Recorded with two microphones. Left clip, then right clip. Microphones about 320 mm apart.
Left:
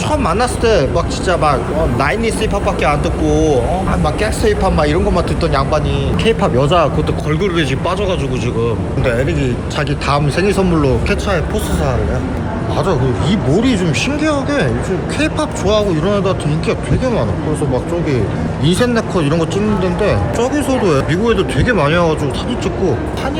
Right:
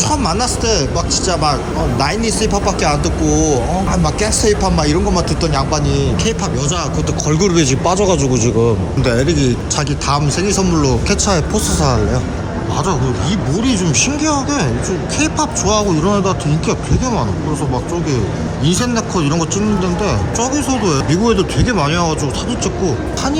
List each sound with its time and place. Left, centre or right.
0.1 s speech: centre
7.3 s speech: centre
10.1 s speech: centre
12.9 s speech: centre
18.6 s speech: centre